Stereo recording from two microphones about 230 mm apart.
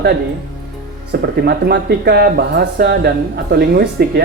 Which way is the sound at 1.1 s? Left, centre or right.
Right.